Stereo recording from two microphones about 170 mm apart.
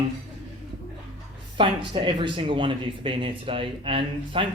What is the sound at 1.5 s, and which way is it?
A man's voice, 30° right (ahead or behind).